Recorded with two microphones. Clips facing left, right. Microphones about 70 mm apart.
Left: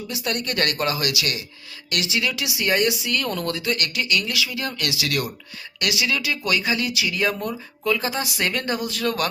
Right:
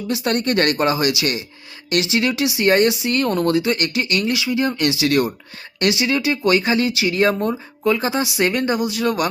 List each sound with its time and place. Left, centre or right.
0.1 s speech: right; by 9.2 s centre